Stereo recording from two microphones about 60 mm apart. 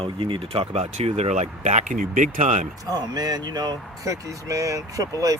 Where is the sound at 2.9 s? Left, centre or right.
Right.